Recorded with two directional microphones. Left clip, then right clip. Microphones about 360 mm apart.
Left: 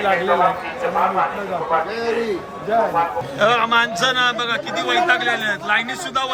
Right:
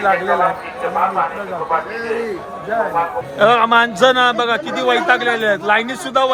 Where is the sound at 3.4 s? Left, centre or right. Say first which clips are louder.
Right 4 dB; centre.